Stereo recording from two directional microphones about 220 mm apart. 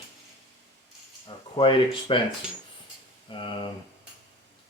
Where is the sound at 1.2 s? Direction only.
25° left (ahead or behind).